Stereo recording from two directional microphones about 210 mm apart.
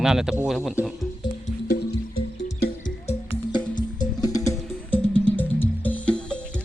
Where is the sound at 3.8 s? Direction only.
20° left (ahead or behind).